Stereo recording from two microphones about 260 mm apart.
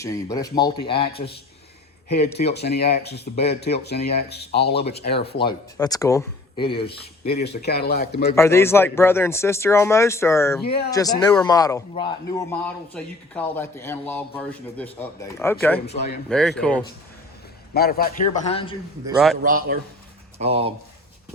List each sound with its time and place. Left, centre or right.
0.0 s a man's voice: centre
2.5 s speech: left
5.4 s a man's voice: centre
7.3 s speech: left
8.4 s a man's voice: centre
12.5 s a man's voice: centre
15.9 s a man's voice: left
16.3 s speech: centre
17.7 s a man's voice: left
19.0 s speech: centre
19.4 s a man's voice: right
20.4 s speech: right